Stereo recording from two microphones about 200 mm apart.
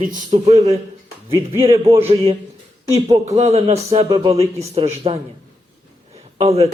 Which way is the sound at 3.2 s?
30° right (ahead or behind).